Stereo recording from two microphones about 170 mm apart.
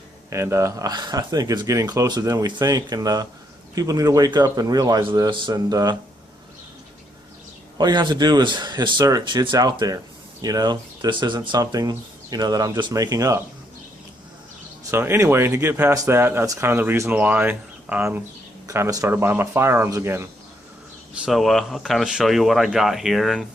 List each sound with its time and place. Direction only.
0.3 s speech: 15° right (ahead or behind)
7.8 s speech: 25° right (ahead or behind)
14.8 s speech: 15° right (ahead or behind)
21.2 s speech: centre (ahead or behind)